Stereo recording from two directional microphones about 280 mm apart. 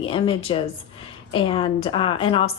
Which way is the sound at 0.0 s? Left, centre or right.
Centre.